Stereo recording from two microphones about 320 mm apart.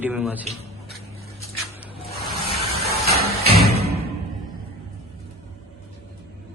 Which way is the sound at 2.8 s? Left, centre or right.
Right.